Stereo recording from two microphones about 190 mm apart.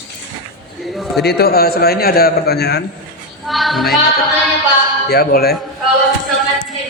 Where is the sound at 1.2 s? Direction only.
55° left (ahead or behind).